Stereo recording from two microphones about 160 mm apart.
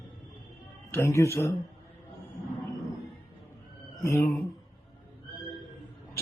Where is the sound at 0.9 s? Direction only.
15° left (ahead or behind).